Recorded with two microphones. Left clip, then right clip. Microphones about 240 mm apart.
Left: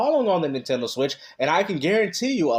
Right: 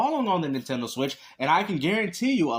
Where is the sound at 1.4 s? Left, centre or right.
Right.